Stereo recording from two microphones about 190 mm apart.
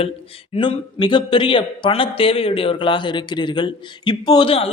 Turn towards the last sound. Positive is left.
turn(degrees=25)  # may be behind; listen again after turning